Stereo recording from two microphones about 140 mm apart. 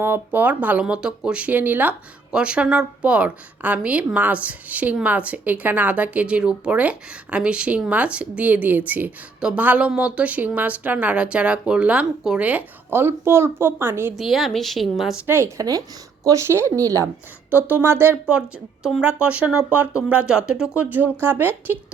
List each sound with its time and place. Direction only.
0.0 s speech: 15° right (ahead or behind)
14.2 s speech: centre (ahead or behind)
15.3 s speech: 20° right (ahead or behind)
18.3 s speech: 5° right (ahead or behind)